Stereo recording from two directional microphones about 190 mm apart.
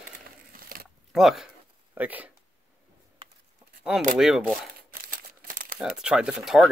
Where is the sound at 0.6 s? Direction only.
50° right (ahead or behind).